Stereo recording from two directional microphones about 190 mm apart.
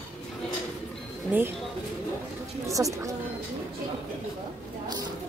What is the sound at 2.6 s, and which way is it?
Speech, 15° right (ahead or behind).